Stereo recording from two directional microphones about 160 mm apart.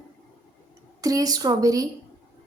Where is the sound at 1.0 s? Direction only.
20° right (ahead or behind).